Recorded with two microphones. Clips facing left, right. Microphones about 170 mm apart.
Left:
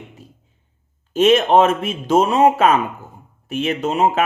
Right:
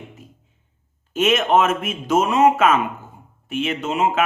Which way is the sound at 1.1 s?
35° left (ahead or behind).